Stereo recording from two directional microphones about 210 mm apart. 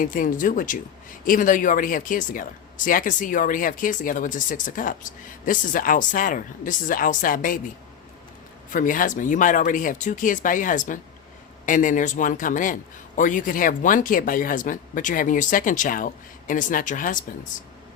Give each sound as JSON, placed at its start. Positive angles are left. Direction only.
{"t": 0.0, "sound": "a man's voice", "side_deg": 40}
{"t": 8.7, "sound": "a man's voice", "side_deg": 40}